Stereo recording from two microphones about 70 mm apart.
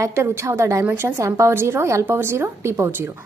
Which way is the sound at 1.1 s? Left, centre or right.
Right.